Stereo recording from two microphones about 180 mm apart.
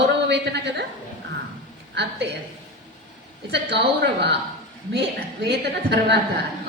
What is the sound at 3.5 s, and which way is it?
Speech, 70° right (ahead or behind).